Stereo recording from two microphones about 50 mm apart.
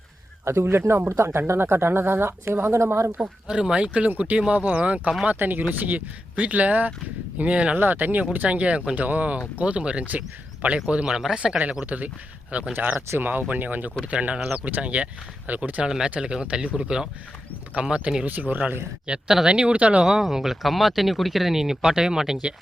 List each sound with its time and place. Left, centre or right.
0.4 s speech: right
3.2 s speech: centre
5.4 s speech: right
7.8 s speech: right
8.4 s speech: right
11.6 s speech: centre
11.9 s speech: right
12.7 s speech: right; by 18.3 s centre
18.3 s speech: right
20.0 s speech: centre